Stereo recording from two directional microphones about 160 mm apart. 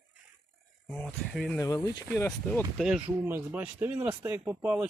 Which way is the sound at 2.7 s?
5° right (ahead or behind).